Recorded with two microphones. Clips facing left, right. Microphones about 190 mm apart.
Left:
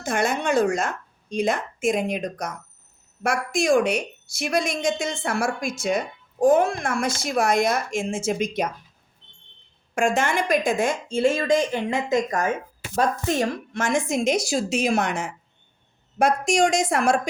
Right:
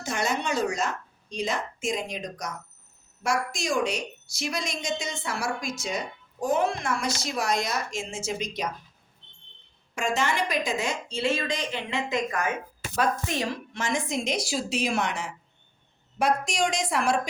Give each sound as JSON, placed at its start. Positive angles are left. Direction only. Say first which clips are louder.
{"t": 0.0, "sound": "a woman's voice", "louder": "left 5 dB", "side_deg": 55}
{"t": 9.9, "sound": "speech", "louder": "left 5 dB", "side_deg": 50}